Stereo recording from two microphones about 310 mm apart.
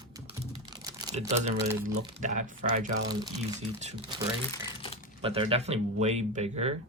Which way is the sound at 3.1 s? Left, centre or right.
Centre.